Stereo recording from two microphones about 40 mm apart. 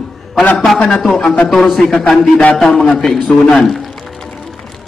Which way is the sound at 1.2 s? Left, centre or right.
Left.